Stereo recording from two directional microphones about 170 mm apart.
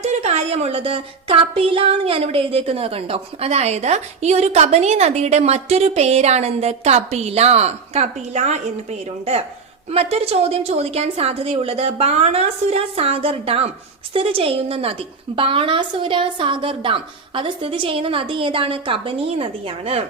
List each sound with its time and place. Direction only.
0.0 s a woman's voice: 40° right (ahead or behind)